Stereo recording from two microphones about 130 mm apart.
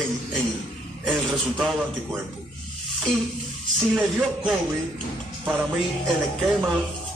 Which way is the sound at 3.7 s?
5° right (ahead or behind).